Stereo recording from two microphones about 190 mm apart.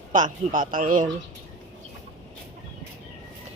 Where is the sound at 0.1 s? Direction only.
45° right (ahead or behind).